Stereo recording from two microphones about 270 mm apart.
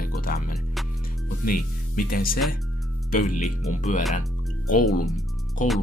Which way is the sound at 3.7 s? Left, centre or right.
Left.